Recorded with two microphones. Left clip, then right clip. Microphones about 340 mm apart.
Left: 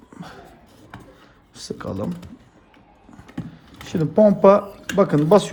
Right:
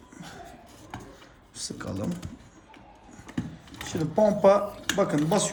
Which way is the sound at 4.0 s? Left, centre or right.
Left.